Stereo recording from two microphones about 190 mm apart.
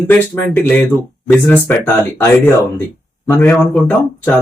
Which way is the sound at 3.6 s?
Centre (ahead or behind).